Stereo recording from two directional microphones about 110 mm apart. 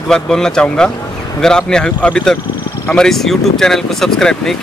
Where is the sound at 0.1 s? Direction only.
5° left (ahead or behind).